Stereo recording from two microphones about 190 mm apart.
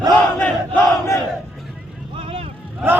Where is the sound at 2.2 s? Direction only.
30° right (ahead or behind).